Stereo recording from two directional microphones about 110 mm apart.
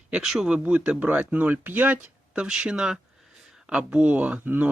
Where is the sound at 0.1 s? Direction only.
5° right (ahead or behind).